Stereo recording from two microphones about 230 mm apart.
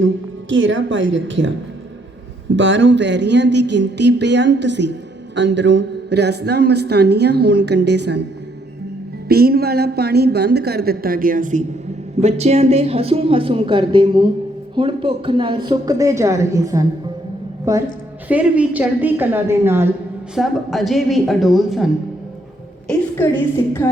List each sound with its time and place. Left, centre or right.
0.0 s a woman's voice: right
2.6 s speech: right
9.3 s a woman's voice: right; by 19.9 s centre
20.3 s a woman's voice: centre
22.9 s a woman's voice: centre